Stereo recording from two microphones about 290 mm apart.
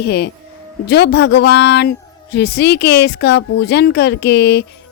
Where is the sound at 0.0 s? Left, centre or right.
Left.